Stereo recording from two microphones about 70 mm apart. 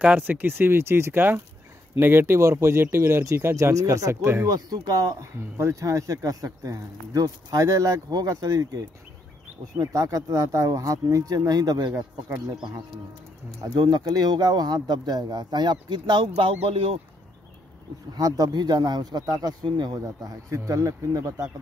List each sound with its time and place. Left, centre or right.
0.0 s speech: right
4.5 s speech: right
5.2 s speech: right
13.7 s speech: right
18.1 s speech: right
20.0 s speech: right